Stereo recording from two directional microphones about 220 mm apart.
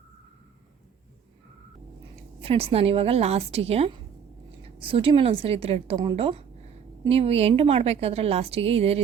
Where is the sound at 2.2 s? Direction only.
25° right (ahead or behind).